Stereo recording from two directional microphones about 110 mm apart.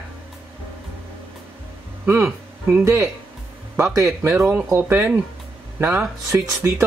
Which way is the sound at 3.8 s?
25° right (ahead or behind).